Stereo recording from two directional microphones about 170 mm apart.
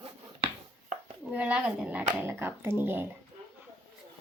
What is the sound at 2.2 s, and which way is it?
Speech, 15° right (ahead or behind).